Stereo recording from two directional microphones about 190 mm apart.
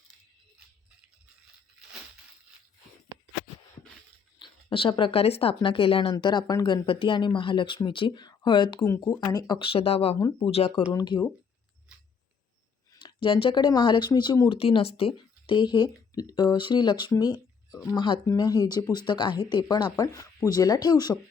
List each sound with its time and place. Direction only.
4.4 s speech: 25° left (ahead or behind)
10.2 s speech: 20° left (ahead or behind)
10.5 s speech: 30° left (ahead or behind)
12.9 s speech: 25° left (ahead or behind)